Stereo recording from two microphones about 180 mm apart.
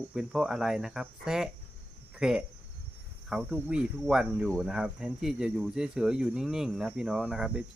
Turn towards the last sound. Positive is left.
turn(degrees=-5)  # may be behind; listen again after turning